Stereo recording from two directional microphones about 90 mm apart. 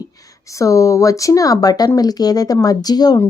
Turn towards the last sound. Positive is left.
turn(degrees=45)  # may be behind; listen again after turning